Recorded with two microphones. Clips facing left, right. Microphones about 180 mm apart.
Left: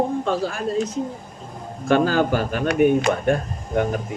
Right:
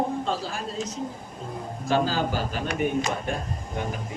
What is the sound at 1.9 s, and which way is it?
Speech, 55° left (ahead or behind).